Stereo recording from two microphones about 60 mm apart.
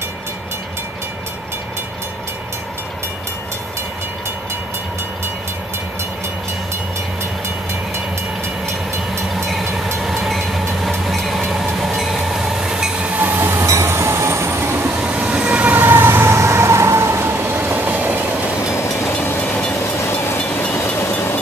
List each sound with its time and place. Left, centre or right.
9.3 s vehicle: centre
13.2 s train: right
15.0 s vehicle: right
19.4 s train: centre
20.3 s vehicle: left